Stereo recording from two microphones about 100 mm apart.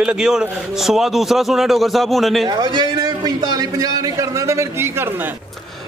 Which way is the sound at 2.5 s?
50° right (ahead or behind).